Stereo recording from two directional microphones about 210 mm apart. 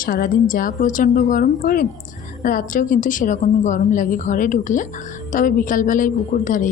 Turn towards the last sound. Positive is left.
turn(degrees=40)  # may be behind; listen again after turning